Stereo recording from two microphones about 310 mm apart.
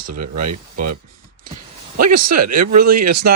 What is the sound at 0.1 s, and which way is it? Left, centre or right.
Speech, right.